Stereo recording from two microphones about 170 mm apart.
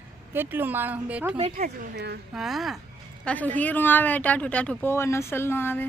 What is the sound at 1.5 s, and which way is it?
Speech, 70° right (ahead or behind).